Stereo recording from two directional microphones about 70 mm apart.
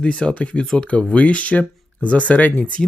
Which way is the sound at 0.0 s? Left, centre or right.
Centre.